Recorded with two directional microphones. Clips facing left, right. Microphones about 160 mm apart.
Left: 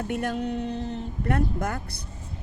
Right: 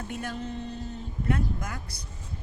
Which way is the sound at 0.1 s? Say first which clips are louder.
Left 7 dB; 60° left (ahead or behind).